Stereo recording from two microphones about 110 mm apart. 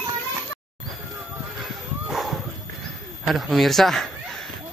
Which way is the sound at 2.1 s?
Centre (ahead or behind).